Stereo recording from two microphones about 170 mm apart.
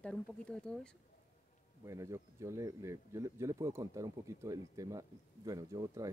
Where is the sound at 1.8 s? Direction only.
20° right (ahead or behind).